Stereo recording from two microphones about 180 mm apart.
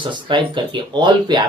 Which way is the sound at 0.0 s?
25° right (ahead or behind).